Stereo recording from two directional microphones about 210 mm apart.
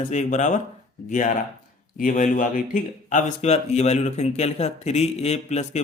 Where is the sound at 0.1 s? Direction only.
35° left (ahead or behind).